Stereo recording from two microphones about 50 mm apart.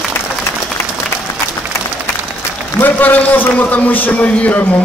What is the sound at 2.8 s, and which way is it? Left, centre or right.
A man's voice, left.